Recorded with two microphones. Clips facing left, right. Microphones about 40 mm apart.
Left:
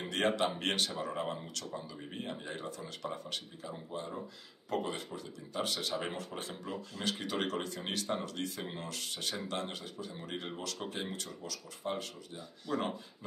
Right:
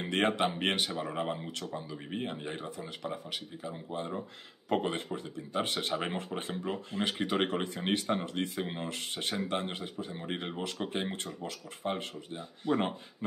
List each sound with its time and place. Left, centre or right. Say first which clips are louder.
0.0 s speech: right 3 dB; right
3.9 s speech: right 5 dB; right